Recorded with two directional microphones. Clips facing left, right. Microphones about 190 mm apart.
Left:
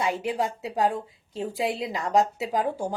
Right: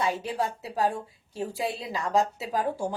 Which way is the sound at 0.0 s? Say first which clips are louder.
Left 2 dB; 15° left (ahead or behind).